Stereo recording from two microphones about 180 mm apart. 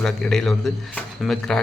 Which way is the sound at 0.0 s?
5° left (ahead or behind).